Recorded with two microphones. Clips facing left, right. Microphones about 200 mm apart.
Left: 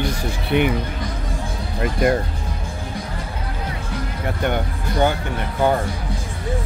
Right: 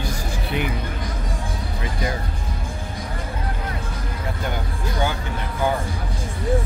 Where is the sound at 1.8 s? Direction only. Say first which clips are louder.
Left 10 dB; 60° left (ahead or behind).